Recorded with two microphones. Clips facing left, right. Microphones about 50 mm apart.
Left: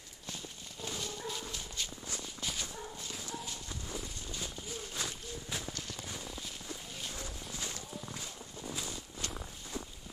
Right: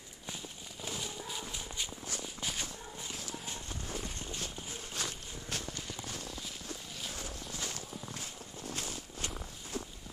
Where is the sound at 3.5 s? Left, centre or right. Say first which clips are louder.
Right 1 dB; right.